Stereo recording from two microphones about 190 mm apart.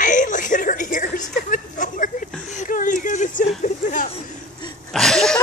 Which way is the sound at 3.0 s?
40° left (ahead or behind).